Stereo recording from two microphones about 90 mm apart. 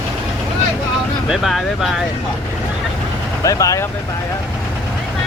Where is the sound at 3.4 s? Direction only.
40° left (ahead or behind).